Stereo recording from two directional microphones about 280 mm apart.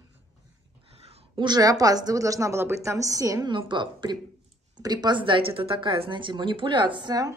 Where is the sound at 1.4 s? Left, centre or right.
Centre.